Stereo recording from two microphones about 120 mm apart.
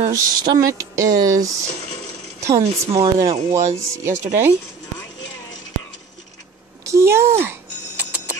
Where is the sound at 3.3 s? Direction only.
70° right (ahead or behind).